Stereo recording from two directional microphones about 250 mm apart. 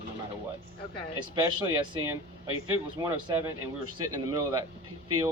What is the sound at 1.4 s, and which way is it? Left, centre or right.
Speech, centre.